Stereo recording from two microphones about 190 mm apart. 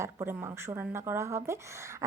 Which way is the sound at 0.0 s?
15° right (ahead or behind).